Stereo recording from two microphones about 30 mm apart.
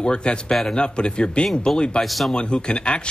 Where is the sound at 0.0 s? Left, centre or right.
Left.